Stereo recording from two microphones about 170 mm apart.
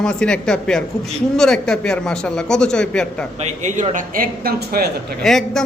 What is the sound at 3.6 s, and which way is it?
Speech, 45° right (ahead or behind).